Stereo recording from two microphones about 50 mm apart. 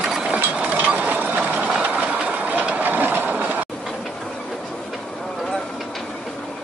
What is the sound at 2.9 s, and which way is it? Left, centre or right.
Train, right.